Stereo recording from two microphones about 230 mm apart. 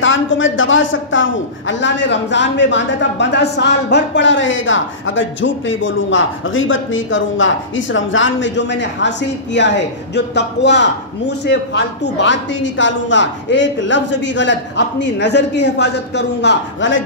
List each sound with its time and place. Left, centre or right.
0.0 s a man's voice: left